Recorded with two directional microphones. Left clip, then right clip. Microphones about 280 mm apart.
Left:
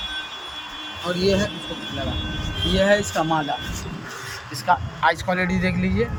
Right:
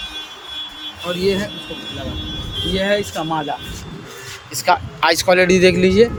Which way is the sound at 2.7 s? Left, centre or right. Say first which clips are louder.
Even; centre.